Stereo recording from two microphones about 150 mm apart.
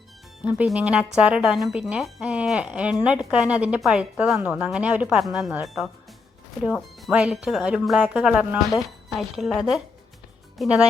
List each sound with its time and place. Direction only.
0.4 s speech: 5° right (ahead or behind)